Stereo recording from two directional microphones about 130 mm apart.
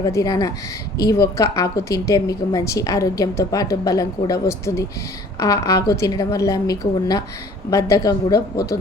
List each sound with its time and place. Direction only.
0.0 s a woman's voice: 25° left (ahead or behind)